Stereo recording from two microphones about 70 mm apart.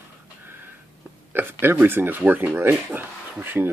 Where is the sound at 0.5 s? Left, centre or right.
Right.